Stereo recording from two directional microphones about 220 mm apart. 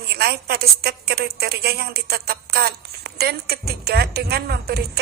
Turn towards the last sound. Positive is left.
turn(degrees=-45)  # may be behind; listen again after turning